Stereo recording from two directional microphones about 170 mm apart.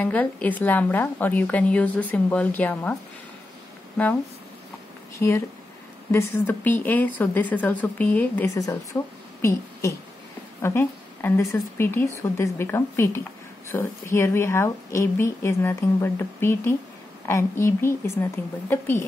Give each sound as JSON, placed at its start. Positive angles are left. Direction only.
{"t": 0.0, "sound": "speech", "side_deg": 10}
{"t": 5.2, "sound": "a woman's voice", "side_deg": 15}